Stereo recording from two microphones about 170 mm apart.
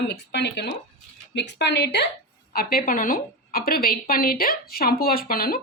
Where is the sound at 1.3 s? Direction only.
90° left.